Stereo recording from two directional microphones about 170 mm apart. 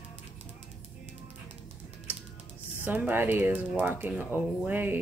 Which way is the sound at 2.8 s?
10° right (ahead or behind).